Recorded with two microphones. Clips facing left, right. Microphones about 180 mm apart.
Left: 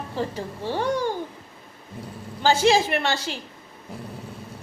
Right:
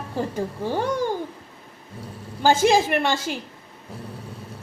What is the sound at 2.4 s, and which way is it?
Speech, 45° right (ahead or behind).